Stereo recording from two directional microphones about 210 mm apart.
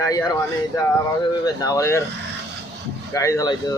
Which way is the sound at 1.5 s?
15° left (ahead or behind).